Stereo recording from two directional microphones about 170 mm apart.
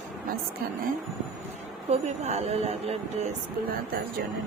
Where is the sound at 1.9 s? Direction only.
40° right (ahead or behind).